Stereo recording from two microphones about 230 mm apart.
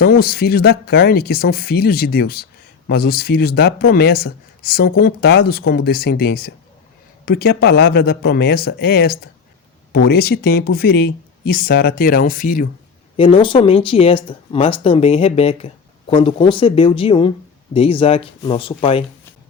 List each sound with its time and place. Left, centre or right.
0.0 s speech: left
13.1 s speech: left